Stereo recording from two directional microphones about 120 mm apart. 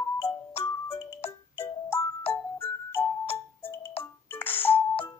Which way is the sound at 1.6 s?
20° left (ahead or behind).